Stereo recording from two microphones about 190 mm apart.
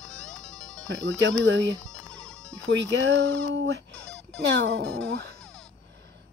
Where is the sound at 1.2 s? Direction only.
70° right (ahead or behind).